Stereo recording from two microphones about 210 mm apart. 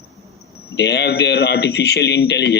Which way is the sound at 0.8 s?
55° left (ahead or behind).